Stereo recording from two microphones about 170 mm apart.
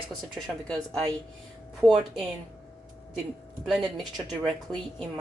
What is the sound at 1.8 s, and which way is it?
Speech, centre (ahead or behind).